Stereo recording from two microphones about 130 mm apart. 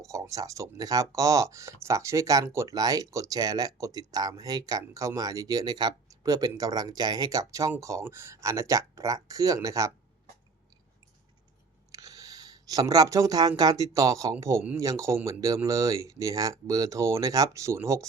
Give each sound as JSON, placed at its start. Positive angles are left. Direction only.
{"t": 0.0, "sound": "speech", "side_deg": -25}
{"t": 11.9, "sound": "a sound", "side_deg": -25}
{"t": 13.6, "sound": "speech", "side_deg": -30}